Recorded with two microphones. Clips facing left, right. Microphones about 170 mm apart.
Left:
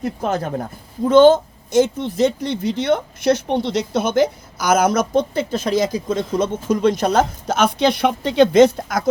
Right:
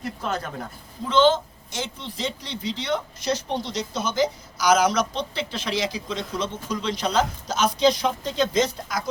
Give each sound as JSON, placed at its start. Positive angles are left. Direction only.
{"t": 0.0, "sound": "a man's voice", "side_deg": 50}